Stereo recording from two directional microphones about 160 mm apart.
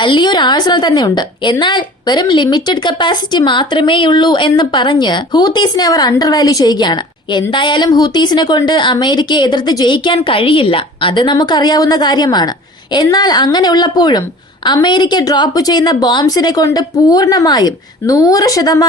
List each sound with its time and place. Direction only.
0.0 s a woman's voice: 30° left (ahead or behind)